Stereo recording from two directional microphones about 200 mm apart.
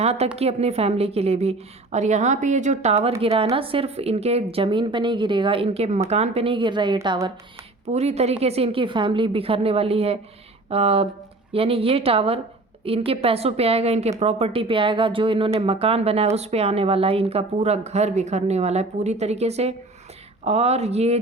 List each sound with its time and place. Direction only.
0.0 s a woman's voice: 30° right (ahead or behind)
7.9 s a woman's voice: 30° right (ahead or behind)